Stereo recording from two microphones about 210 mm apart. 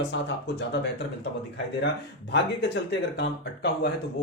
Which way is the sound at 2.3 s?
55° left (ahead or behind).